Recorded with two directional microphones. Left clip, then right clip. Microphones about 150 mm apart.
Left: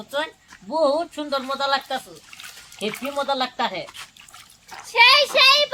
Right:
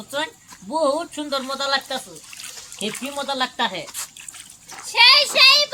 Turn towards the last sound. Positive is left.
turn(degrees=10)  # may be behind; listen again after turning